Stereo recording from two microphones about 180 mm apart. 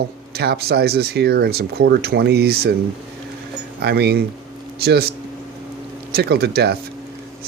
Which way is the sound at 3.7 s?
65° right (ahead or behind).